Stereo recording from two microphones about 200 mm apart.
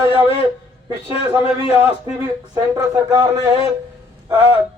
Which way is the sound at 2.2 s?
15° right (ahead or behind).